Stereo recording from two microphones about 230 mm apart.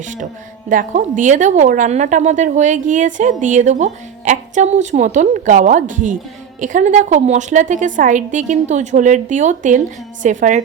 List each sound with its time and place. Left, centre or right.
0.7 s a woman's voice: right